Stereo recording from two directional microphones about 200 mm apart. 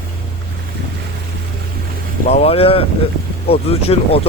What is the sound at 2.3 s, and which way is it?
Speech, 30° left (ahead or behind).